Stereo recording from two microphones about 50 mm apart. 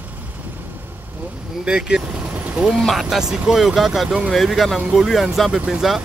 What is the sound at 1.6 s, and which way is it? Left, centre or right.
Speech, centre.